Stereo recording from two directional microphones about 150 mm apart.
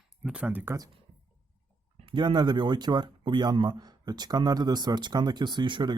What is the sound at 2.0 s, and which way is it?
Speech, 30° right (ahead or behind).